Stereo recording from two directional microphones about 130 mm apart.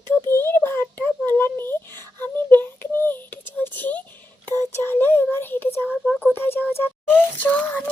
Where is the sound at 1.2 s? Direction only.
15° left (ahead or behind).